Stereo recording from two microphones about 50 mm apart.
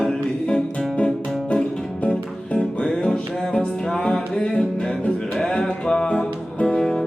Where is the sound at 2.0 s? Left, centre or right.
Left.